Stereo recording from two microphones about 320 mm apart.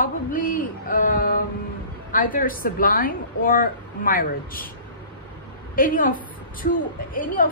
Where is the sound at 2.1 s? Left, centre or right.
Left.